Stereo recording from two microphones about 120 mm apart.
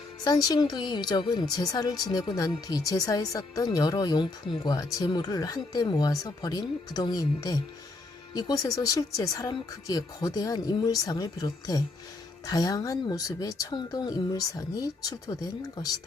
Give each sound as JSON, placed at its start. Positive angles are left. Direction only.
{"t": 0.3, "sound": "a woman's voice", "side_deg": 35}